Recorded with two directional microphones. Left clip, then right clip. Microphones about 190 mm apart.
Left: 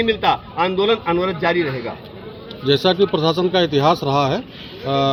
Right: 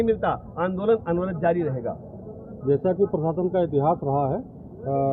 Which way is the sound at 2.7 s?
60° left (ahead or behind).